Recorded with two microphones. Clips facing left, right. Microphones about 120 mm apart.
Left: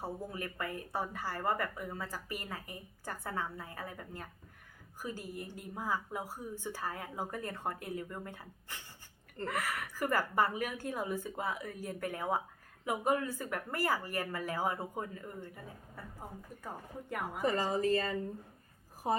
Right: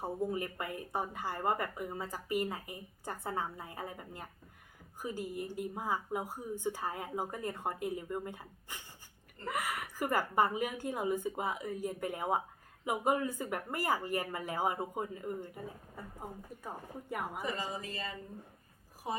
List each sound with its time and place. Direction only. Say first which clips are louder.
0.0 s a woman's voice: right 5 dB; 20° right (ahead or behind)
16.6 s a woman's voice: right 1 dB; 5° right (ahead or behind)
17.4 s a woman's voice: left 7 dB; 45° left (ahead or behind)